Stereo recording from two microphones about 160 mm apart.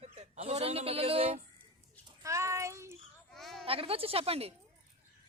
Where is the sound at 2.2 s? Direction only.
20° right (ahead or behind).